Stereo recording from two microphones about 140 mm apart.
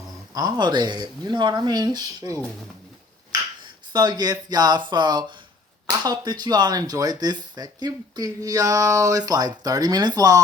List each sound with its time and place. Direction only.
0.3 s speech: 30° right (ahead or behind)
3.9 s speech: 30° right (ahead or behind)